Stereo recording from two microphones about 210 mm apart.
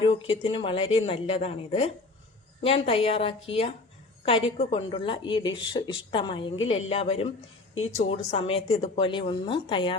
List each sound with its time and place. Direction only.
0.0 s speech: 25° left (ahead or behind)